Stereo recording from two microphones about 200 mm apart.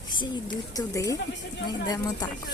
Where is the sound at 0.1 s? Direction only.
20° left (ahead or behind).